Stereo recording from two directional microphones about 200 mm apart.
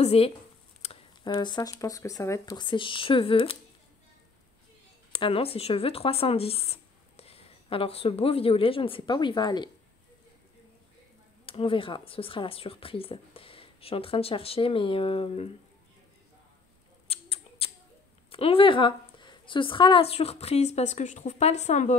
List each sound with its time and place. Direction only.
0.0 s speech: 30° left (ahead or behind)
5.1 s speech: 25° left (ahead or behind)
11.4 s speech: 25° left (ahead or behind)
17.1 s a sound: 30° left (ahead or behind)
18.3 s a woman's voice: 25° left (ahead or behind)